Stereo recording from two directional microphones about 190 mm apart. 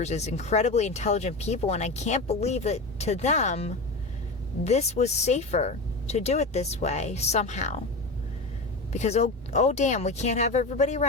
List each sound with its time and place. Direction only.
0.0 s speech: 35° left (ahead or behind)
8.9 s speech: 35° left (ahead or behind)